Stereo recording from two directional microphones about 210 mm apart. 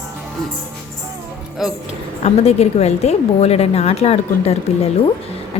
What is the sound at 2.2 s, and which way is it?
A woman's voice, 30° left (ahead or behind).